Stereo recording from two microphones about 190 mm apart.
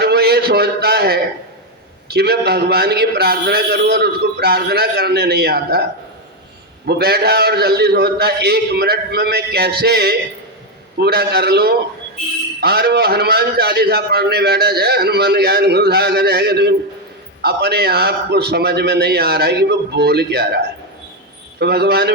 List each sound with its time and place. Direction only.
0.0 s a man's voice: 55° right (ahead or behind)
6.8 s a man's voice: 55° right (ahead or behind)
21.6 s a man's voice: 60° right (ahead or behind)